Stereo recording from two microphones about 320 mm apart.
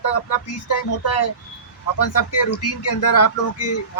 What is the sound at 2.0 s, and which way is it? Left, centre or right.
Speech, left.